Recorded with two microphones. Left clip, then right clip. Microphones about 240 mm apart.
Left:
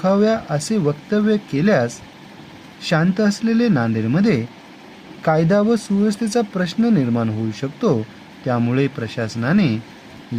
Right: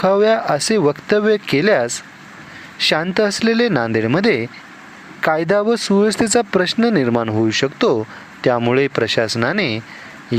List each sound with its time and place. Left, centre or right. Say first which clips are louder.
0.0 s speech: right 4 dB; right